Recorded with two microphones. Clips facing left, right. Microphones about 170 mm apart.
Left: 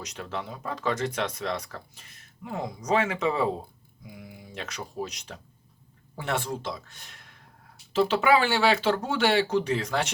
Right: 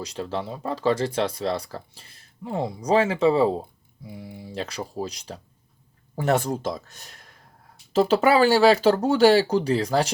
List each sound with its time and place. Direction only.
0.0 s speech: 30° right (ahead or behind)